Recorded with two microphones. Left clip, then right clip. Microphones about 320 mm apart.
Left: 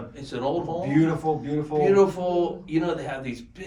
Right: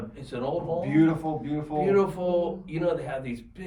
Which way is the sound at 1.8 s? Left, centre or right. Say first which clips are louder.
Left 4 dB; centre.